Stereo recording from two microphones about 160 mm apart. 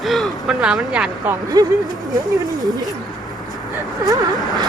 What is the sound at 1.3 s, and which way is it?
Speech, 25° right (ahead or behind).